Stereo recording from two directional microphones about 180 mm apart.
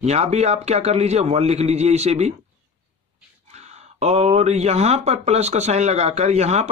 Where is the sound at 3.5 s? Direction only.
40° right (ahead or behind).